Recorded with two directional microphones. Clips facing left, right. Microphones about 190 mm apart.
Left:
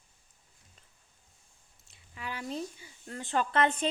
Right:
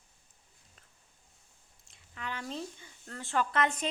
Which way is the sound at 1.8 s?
5° left (ahead or behind).